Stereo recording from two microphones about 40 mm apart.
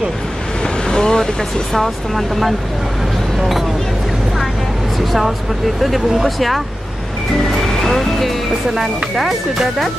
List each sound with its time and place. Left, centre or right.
0.8 s vehicle: centre
1.7 s speech: centre
3.3 s a sound: centre
5.8 s speech: centre
7.4 s music: centre
8.7 s speech: centre